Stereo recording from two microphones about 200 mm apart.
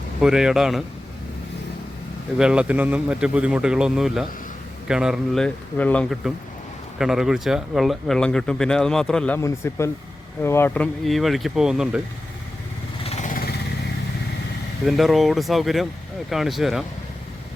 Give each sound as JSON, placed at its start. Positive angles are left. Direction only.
{"t": 0.2, "sound": "speech", "side_deg": -5}
{"t": 2.4, "sound": "speech", "side_deg": -5}
{"t": 11.0, "sound": "speech", "side_deg": 0}
{"t": 13.1, "sound": "vehicle", "side_deg": 40}
{"t": 14.8, "sound": "speech", "side_deg": 0}